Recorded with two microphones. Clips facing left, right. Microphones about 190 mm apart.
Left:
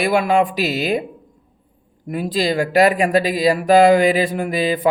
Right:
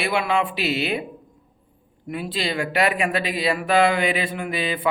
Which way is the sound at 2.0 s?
40° left (ahead or behind).